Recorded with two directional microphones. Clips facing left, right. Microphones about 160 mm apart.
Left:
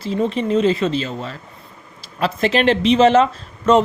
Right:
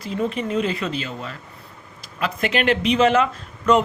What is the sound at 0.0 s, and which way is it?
Speech, 30° left (ahead or behind).